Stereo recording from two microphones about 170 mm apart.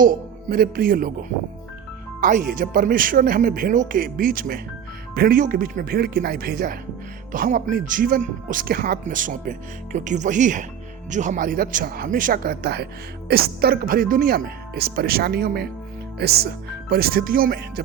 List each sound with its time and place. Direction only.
0.5 s speech: 60° right (ahead or behind)
2.2 s speech: 55° right (ahead or behind)